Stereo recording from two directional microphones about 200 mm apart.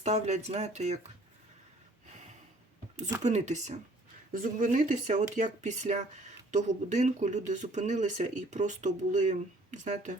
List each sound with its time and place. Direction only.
0.0 s speech: 35° right (ahead or behind)
3.2 s speech: 35° right (ahead or behind)